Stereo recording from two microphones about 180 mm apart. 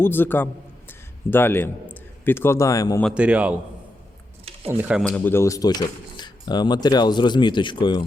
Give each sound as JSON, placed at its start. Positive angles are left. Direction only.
{"t": 0.0, "sound": "a man's voice", "side_deg": 10}
{"t": 3.0, "sound": "speech", "side_deg": -5}
{"t": 4.7, "sound": "speech", "side_deg": -10}
{"t": 5.0, "sound": "speech", "side_deg": 10}